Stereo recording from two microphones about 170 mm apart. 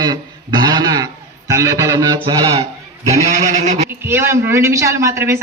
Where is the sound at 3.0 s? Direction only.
40° right (ahead or behind).